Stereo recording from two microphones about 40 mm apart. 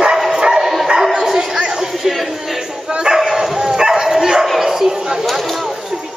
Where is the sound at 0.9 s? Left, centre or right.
Centre.